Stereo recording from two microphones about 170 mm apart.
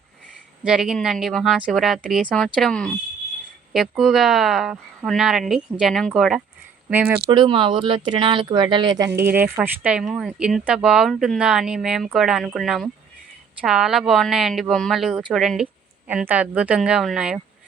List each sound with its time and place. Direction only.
0.6 s speech: 5° right (ahead or behind)
6.9 s speech: 10° right (ahead or behind)
7.3 s speech: 30° right (ahead or behind); by 17.4 s 5° right (ahead or behind)